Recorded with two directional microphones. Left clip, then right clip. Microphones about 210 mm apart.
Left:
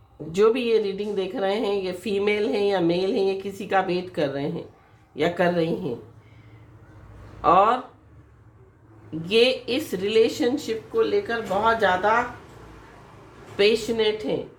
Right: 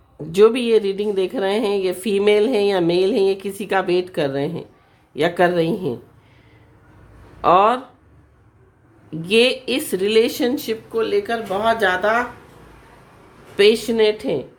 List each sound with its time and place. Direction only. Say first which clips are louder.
0.3 s a woman's voice: right 5 dB; 45° right (ahead or behind)
7.4 s a woman's voice: right 4 dB; 45° right (ahead or behind)
9.2 s a woman's voice: right 4 dB; 45° right (ahead or behind)
13.6 s a woman's voice: right 6 dB; 45° right (ahead or behind)